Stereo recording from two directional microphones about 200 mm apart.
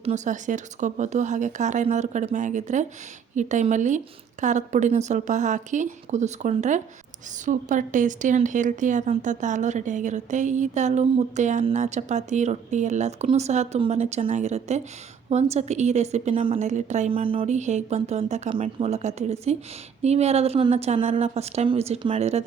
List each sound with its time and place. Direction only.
0.0 s speech: 35° right (ahead or behind)